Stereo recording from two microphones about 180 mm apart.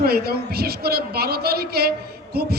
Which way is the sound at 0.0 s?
60° right (ahead or behind).